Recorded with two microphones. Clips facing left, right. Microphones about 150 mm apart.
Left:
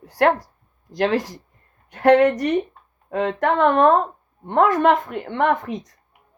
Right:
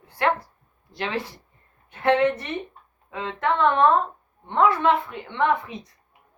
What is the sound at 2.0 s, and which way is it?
Speech, 80° left.